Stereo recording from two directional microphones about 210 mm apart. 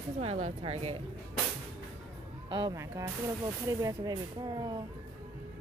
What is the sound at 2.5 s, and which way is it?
Speech, 15° right (ahead or behind).